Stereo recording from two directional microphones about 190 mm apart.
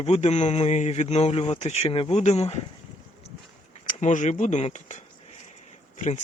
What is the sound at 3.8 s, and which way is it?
Speech, 40° left (ahead or behind).